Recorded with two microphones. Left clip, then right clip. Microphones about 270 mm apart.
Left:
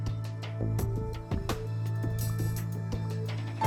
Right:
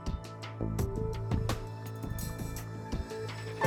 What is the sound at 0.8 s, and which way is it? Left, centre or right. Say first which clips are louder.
Music: right 1 dB; centre.